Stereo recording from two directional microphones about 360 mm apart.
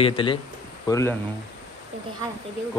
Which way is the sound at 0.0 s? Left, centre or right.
Centre.